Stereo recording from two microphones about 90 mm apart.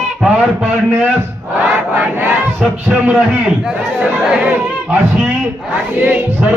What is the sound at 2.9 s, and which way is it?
Speech, 15° right (ahead or behind).